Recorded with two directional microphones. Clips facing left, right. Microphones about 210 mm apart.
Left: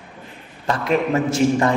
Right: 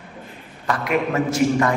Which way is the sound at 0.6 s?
30° left (ahead or behind).